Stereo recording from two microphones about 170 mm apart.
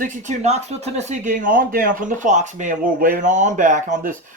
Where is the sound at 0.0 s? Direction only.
45° right (ahead or behind).